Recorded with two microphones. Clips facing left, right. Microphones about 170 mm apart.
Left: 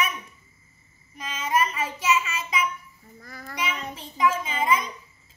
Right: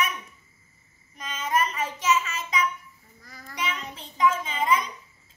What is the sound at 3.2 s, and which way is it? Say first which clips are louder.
Child singing: left 5 dB; 60° left (ahead or behind).